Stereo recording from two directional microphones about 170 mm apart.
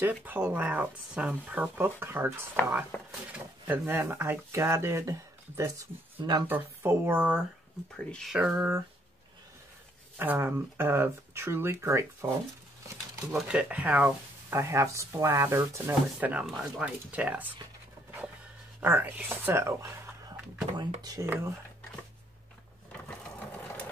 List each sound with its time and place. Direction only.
0.0 s speech: 10° right (ahead or behind)
6.4 s speech: 10° right (ahead or behind)
7.9 s speech: 5° left (ahead or behind)
8.5 s speech: 15° right (ahead or behind)
10.1 s speech: 10° right (ahead or behind)
13.5 s speech: 5° right (ahead or behind)
18.8 s speech: 10° right (ahead or behind)
23.0 s sewing machine: 10° left (ahead or behind)